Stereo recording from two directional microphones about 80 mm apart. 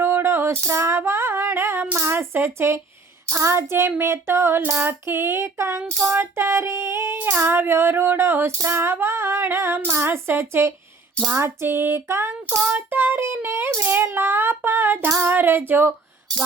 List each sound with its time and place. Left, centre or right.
0.0 s female singing: right
3.2 s child singing: right
15.2 s female singing: right